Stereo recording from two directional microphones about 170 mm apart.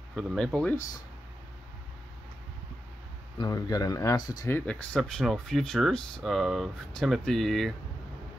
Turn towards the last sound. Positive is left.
turn(degrees=0)  # may be behind; listen again after turning